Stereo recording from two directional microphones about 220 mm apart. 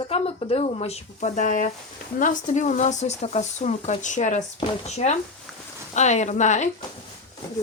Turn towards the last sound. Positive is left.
turn(degrees=35)  # may be behind; listen again after turning